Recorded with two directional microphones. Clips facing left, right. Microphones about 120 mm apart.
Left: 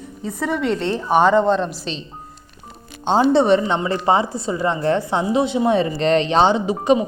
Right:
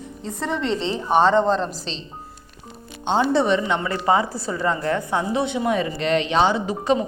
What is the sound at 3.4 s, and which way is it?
Speech, 40° left (ahead or behind).